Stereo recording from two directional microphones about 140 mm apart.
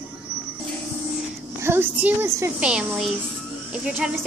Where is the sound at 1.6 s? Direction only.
15° right (ahead or behind).